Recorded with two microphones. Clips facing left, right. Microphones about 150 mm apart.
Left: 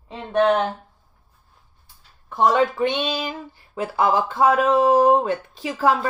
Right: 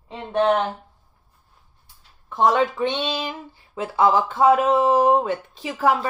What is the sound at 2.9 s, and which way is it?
Speech, 25° right (ahead or behind).